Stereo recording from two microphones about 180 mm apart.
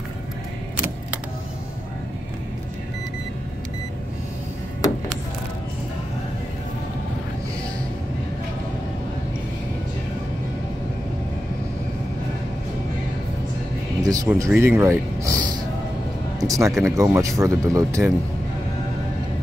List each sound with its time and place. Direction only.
14.0 s speech: 20° right (ahead or behind)
16.3 s music: 20° right (ahead or behind)
16.8 s speech: 15° right (ahead or behind)